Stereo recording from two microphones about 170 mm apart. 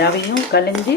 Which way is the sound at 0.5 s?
70° left (ahead or behind).